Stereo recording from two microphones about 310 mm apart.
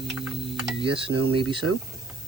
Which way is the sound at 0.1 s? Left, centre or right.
Centre.